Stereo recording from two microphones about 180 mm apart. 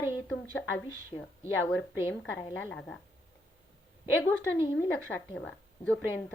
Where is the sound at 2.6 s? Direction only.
10° left (ahead or behind).